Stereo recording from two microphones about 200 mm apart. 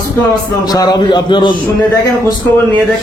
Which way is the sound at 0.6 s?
20° left (ahead or behind).